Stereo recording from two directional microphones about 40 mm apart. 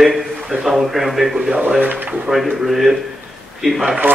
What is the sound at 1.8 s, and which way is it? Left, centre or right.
Speech, right.